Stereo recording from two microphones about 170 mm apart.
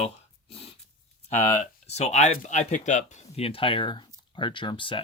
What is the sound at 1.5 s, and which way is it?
Speech, 40° left (ahead or behind).